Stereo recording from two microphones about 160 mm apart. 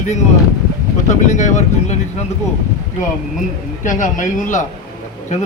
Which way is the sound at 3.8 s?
55° left (ahead or behind).